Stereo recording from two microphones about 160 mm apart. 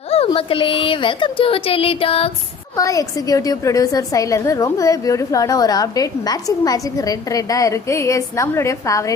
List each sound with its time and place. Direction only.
0.1 s speech: 35° left (ahead or behind)
2.7 s a woman's voice: 20° left (ahead or behind)